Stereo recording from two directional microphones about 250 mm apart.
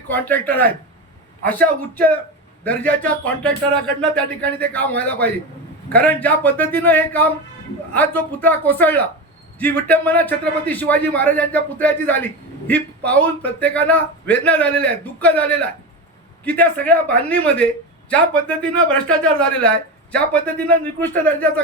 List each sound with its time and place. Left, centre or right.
0.1 s a man's voice: centre